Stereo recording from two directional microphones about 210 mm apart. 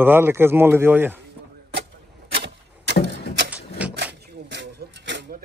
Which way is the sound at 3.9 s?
55° right (ahead or behind).